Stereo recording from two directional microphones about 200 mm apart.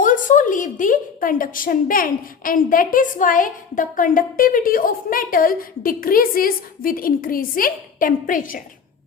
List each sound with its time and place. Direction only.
0.0 s a woman's voice: 40° left (ahead or behind)